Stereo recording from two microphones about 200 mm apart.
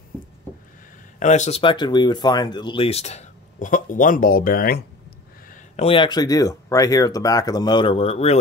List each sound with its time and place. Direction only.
1.2 s speech: 35° left (ahead or behind)
5.5 s speech: 30° left (ahead or behind)